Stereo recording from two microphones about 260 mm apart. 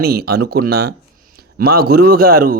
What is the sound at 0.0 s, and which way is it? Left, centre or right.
A man's voice, right.